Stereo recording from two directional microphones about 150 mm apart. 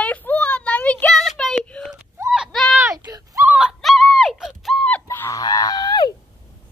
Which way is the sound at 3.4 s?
5° right (ahead or behind).